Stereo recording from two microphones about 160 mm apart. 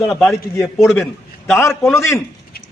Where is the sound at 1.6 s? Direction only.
15° left (ahead or behind).